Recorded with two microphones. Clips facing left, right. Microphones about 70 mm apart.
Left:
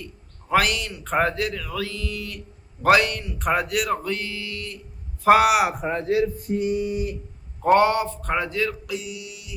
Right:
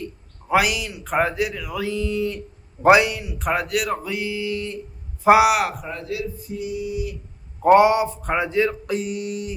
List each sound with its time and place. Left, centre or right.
0.4 s speech: centre
5.2 s a man's voice: centre
5.8 s a man's voice: left
6.3 s a sound: left
7.6 s speech: centre
8.9 s music: right